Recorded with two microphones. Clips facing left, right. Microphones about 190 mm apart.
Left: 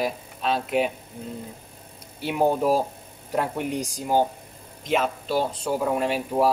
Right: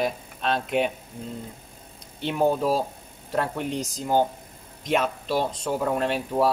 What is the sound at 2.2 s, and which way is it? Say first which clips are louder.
Speech: left 1 dB; 10° left (ahead or behind).